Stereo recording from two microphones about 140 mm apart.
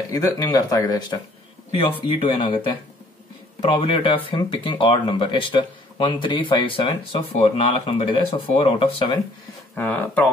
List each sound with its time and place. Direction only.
0.1 s speech: 25° left (ahead or behind)
9.8 s speech: 10° left (ahead or behind)